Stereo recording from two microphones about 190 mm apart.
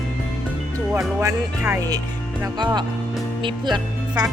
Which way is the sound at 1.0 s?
15° right (ahead or behind).